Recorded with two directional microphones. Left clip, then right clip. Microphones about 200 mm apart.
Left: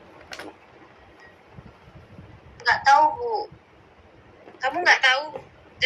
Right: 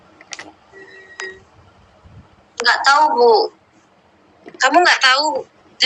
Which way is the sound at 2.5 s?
45° right (ahead or behind).